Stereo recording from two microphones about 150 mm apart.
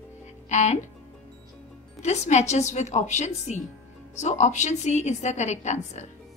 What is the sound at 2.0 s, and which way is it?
A woman's voice, 50° left (ahead or behind).